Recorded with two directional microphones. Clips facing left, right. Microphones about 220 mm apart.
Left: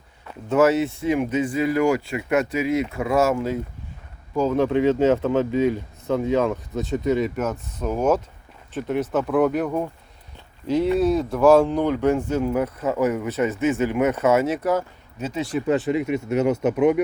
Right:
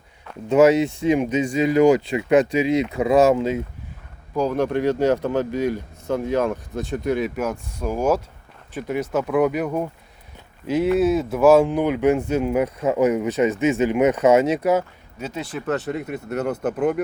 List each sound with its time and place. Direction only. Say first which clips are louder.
0.4 s speech: right 3 dB; 15° right (ahead or behind)
4.5 s speech: left 3 dB; centre (ahead or behind)
15.2 s speech: left 4 dB; centre (ahead or behind)